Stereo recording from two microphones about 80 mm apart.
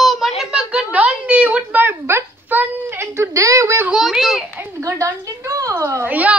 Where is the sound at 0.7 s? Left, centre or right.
Centre.